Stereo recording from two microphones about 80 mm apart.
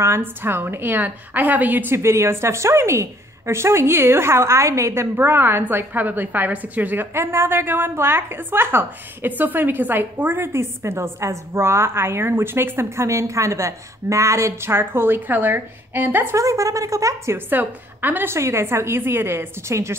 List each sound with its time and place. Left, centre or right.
0.0 s a woman's voice: right
2.0 s a woman's voice: right
7.2 s a woman's voice: right
16.3 s a woman's voice: right
17.5 s a woman's voice: right